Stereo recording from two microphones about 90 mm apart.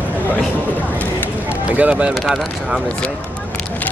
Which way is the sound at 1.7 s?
15° right (ahead or behind).